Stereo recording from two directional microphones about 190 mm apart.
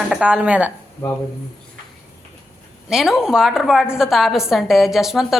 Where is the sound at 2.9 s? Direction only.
Centre (ahead or behind).